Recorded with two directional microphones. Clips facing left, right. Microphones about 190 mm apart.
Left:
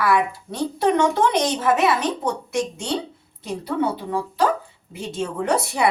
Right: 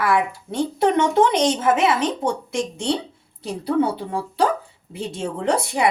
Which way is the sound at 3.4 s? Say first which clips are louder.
Right 3 dB; 30° right (ahead or behind).